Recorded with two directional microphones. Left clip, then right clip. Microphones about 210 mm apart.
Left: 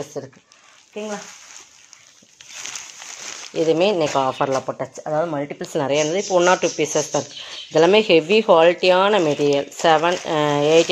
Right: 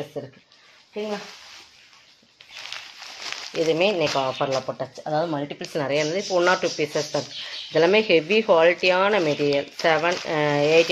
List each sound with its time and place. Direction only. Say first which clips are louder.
0.2 s speech: left 2 dB; 40° left (ahead or behind)
3.5 s speech: left 4 dB; 40° left (ahead or behind)